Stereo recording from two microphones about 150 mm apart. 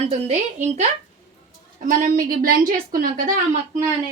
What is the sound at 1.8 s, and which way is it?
A woman's voice, 60° right (ahead or behind).